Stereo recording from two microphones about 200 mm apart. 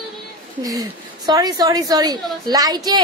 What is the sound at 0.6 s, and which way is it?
A woman's voice, 20° right (ahead or behind).